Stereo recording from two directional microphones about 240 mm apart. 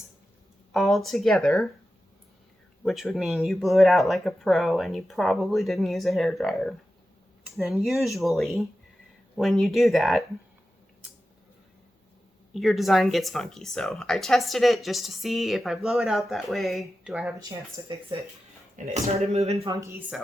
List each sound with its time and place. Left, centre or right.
0.7 s speech: centre
2.8 s speech: centre
12.5 s speech: centre
17.8 s speech: centre
18.8 s speech: right
19.7 s speech: centre